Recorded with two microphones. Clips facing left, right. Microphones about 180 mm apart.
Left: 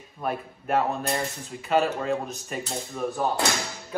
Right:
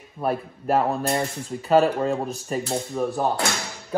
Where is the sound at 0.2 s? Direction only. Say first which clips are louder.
Right 5 dB; 35° right (ahead or behind).